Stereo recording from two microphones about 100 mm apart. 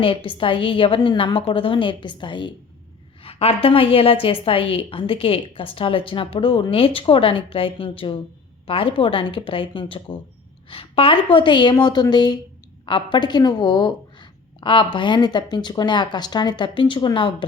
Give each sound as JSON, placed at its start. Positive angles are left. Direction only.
{"t": 0.0, "sound": "a woman's voice", "side_deg": 60}
{"t": 3.2, "sound": "a woman's voice", "side_deg": 80}